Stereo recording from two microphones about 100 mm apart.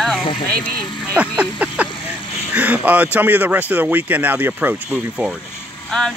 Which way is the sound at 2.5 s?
15° right (ahead or behind).